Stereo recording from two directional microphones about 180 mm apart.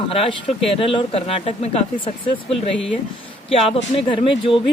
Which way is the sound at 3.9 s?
30° left (ahead or behind).